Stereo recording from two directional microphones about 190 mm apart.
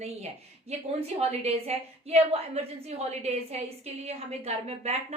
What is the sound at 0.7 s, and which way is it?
A woman's voice, 35° right (ahead or behind).